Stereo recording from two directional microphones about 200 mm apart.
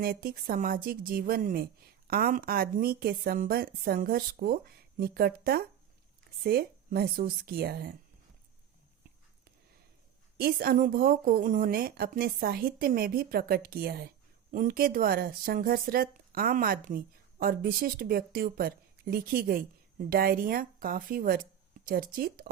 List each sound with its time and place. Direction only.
0.0 s speech: 45° right (ahead or behind)
10.4 s speech: 50° right (ahead or behind)